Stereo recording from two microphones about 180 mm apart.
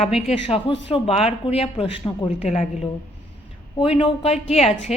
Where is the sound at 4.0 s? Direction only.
30° left (ahead or behind).